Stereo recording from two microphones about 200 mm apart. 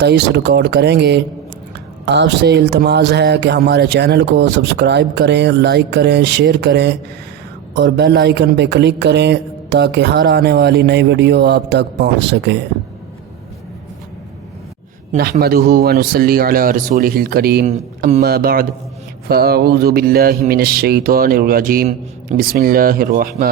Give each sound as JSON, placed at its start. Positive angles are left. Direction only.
{"t": 0.0, "sound": "speech", "side_deg": -55}
{"t": 15.1, "sound": "speech", "side_deg": -50}
{"t": 17.7, "sound": "speech", "side_deg": -35}
{"t": 18.2, "sound": "speech", "side_deg": -50}